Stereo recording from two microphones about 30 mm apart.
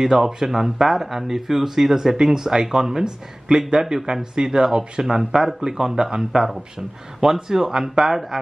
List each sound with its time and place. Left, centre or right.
0.0 s speech: centre